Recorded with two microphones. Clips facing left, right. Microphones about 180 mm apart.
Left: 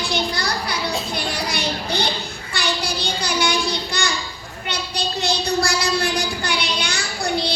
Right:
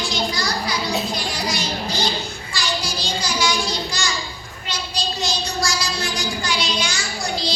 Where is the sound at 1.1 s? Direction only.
60° left (ahead or behind).